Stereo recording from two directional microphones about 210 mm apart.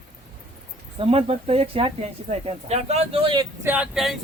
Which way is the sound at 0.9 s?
25° right (ahead or behind).